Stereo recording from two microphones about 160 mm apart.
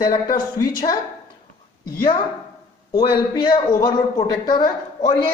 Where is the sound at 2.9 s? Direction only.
30° left (ahead or behind).